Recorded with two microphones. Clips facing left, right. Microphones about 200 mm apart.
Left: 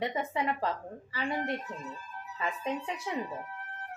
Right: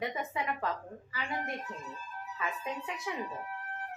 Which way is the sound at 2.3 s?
30° left (ahead or behind).